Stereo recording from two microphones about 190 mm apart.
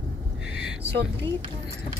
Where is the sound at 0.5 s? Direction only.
90° right.